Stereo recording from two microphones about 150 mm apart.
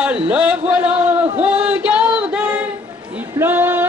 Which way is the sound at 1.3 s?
10° right (ahead or behind).